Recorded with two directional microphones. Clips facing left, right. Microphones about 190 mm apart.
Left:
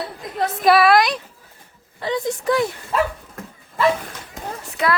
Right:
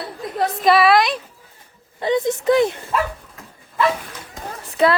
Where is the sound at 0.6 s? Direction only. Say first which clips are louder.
Even; centre (ahead or behind).